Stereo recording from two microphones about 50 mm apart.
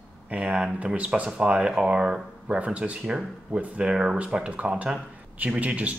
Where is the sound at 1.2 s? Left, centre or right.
Centre.